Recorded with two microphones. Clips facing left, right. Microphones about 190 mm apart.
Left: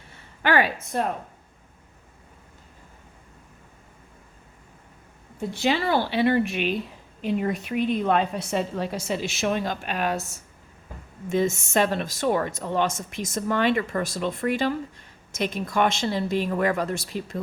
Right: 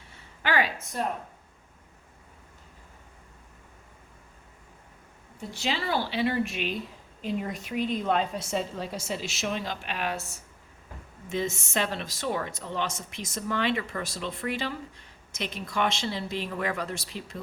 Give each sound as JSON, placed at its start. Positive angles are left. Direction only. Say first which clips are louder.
{"t": 0.4, "sound": "a woman's voice", "louder": "left 5 dB", "side_deg": 55}
{"t": 5.5, "sound": "a woman's voice", "louder": "left 6 dB", "side_deg": 60}